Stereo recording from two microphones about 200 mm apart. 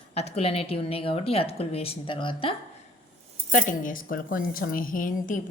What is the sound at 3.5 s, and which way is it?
A woman's voice, 45° left (ahead or behind).